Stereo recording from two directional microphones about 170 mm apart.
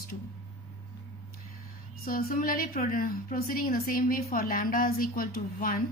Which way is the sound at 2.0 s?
55° left (ahead or behind).